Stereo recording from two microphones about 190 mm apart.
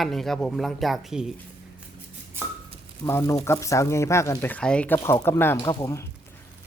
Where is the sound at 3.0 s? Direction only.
15° left (ahead or behind).